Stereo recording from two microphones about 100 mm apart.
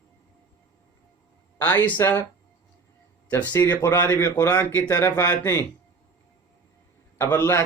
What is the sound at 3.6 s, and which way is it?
Speech, 30° left (ahead or behind).